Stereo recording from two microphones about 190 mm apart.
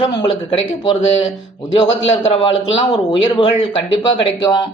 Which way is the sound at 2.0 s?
30° left (ahead or behind).